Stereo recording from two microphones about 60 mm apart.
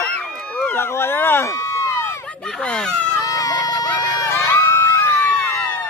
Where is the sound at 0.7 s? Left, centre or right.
Left.